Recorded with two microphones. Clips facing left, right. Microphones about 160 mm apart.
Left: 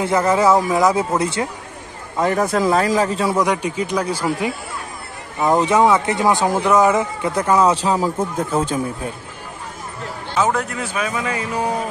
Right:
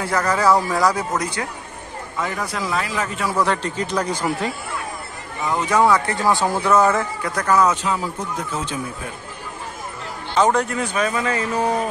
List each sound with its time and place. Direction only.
0.0 s speech: 25° left (ahead or behind)
2.1 s speech: 40° left (ahead or behind)
3.3 s speech: 10° left (ahead or behind)
5.7 s speech: 20° left (ahead or behind)
8.2 s speech: 50° left (ahead or behind)
10.3 s speech: 5° left (ahead or behind)